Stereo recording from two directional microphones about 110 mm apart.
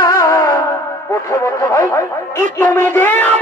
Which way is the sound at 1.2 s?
30° left (ahead or behind).